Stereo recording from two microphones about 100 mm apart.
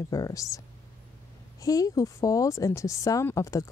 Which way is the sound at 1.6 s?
35° left (ahead or behind).